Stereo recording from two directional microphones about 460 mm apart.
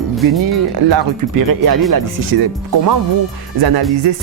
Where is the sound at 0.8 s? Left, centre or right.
Right.